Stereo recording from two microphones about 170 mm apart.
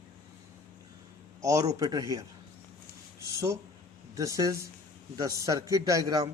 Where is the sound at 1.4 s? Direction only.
20° right (ahead or behind).